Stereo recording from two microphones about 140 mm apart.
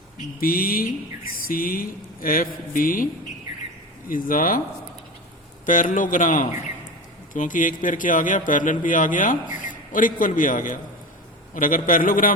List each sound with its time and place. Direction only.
0.3 s speech: 90° left
4.1 s speech: 80° left
5.6 s a man's voice: 65° left (ahead or behind)